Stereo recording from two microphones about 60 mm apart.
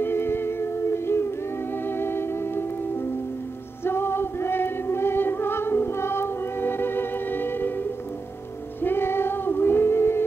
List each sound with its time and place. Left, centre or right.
0.0 s music: left
1.9 s organ: left
3.8 s music: left
8.8 s female singing: left